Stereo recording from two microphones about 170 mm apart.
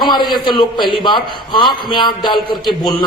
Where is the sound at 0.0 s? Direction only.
25° left (ahead or behind).